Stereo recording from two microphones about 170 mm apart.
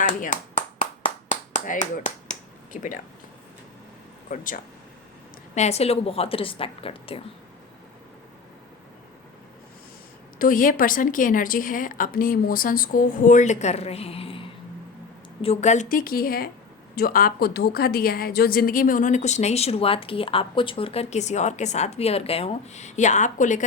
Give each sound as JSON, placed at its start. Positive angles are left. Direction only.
{"t": 0.0, "sound": "a woman's voice", "side_deg": 50}
{"t": 0.5, "sound": "clapping", "side_deg": 35}
{"t": 2.7, "sound": "a woman's voice", "side_deg": 50}
{"t": 4.3, "sound": "a woman's voice", "side_deg": 50}
{"t": 5.5, "sound": "a woman's voice", "side_deg": 40}
{"t": 10.3, "sound": "a woman's voice", "side_deg": 55}